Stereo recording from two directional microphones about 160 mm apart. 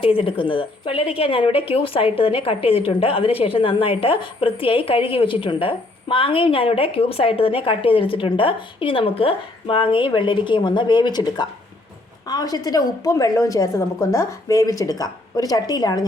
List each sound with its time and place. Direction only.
0.0 s a woman's voice: 35° left (ahead or behind)